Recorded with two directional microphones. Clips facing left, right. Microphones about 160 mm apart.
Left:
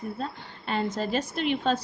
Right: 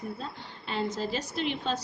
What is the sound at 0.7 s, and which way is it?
A woman's voice, 55° left (ahead or behind).